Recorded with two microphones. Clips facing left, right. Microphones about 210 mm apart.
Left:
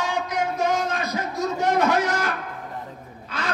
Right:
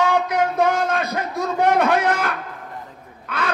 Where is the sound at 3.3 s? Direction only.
60° right (ahead or behind).